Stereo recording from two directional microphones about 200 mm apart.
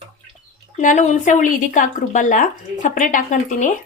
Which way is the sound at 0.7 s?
40° left (ahead or behind).